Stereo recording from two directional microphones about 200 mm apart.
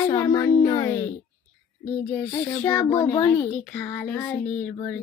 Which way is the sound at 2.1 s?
10° left (ahead or behind).